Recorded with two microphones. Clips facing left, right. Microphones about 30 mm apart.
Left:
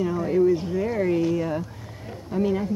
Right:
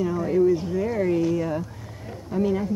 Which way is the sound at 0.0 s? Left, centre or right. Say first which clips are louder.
Even; left.